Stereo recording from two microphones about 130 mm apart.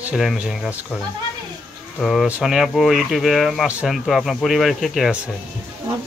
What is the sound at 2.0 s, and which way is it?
Speech, centre (ahead or behind).